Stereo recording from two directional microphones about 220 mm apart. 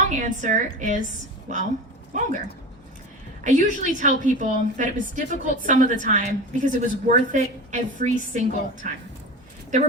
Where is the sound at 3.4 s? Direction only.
35° right (ahead or behind).